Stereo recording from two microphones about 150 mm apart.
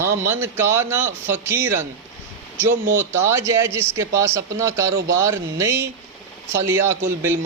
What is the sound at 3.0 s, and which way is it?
Speech, 15° right (ahead or behind).